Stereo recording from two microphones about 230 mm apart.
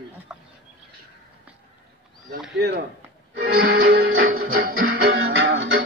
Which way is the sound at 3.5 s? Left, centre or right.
Right.